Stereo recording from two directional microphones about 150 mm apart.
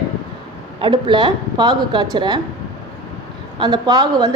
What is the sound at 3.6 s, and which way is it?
Speech, 25° right (ahead or behind).